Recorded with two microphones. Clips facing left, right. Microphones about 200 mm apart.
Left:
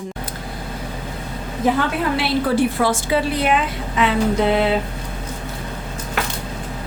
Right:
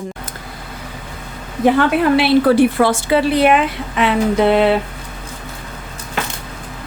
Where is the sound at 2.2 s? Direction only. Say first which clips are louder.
Right 6 dB; 65° right (ahead or behind).